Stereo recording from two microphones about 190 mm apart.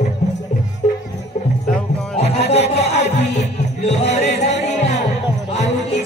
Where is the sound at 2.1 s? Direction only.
35° left (ahead or behind).